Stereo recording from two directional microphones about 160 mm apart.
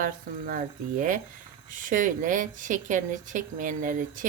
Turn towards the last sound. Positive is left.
turn(degrees=-55)  # may be behind; listen again after turning